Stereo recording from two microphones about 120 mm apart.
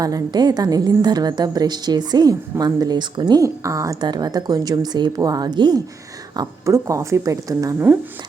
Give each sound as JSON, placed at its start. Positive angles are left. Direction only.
{"t": 0.0, "sound": "a woman's voice", "side_deg": -35}
{"t": 3.4, "sound": "a woman's voice", "side_deg": -25}